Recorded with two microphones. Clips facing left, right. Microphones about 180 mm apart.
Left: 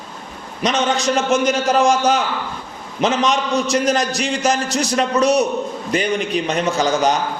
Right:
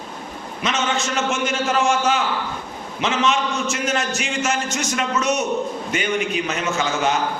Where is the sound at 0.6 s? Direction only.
35° left (ahead or behind).